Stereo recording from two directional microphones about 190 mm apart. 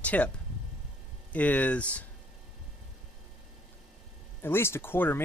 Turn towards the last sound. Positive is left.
turn(degrees=10)  # may be behind; listen again after turning